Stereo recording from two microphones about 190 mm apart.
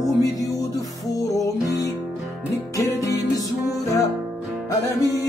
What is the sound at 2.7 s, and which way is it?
Music, 15° left (ahead or behind).